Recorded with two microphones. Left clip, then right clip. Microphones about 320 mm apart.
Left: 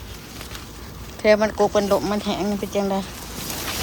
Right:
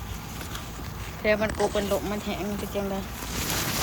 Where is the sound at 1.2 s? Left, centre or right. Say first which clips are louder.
Left 7 dB; left.